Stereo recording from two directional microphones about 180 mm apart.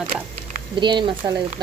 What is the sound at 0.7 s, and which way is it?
Speech, 25° right (ahead or behind).